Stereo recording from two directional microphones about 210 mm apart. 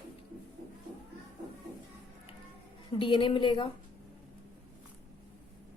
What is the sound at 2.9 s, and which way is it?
Speech, 25° left (ahead or behind).